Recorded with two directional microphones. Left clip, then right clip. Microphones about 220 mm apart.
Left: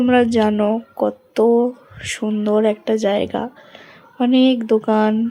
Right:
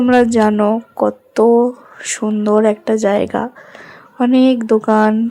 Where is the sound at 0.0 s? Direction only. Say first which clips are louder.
Right 3 dB; 15° right (ahead or behind).